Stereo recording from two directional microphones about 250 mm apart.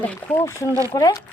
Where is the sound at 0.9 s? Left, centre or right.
Centre.